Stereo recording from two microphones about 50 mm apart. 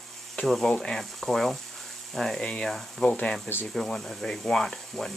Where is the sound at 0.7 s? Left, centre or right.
Centre.